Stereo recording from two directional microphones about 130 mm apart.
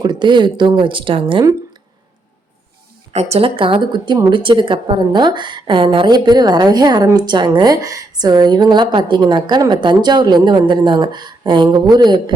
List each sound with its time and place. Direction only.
0.0 s a woman's voice: 35° right (ahead or behind)
3.1 s a woman's voice: 55° right (ahead or behind); by 12.2 s 30° right (ahead or behind)